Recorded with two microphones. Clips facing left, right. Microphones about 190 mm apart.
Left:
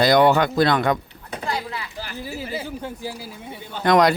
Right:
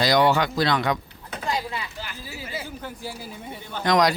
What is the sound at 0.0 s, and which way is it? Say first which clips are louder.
Speech: left 4 dB; 55° left (ahead or behind).